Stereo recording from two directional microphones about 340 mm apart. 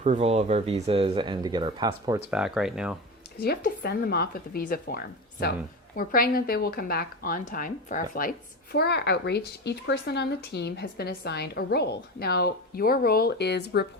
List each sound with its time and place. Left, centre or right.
0.0 s speech: centre
3.4 s a woman's voice: left